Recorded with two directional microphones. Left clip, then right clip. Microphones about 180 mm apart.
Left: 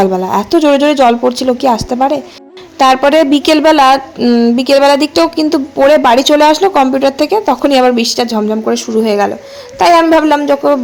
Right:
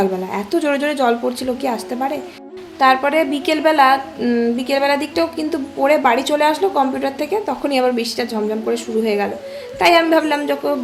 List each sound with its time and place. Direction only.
0.0 s a woman's voice: 35° left (ahead or behind)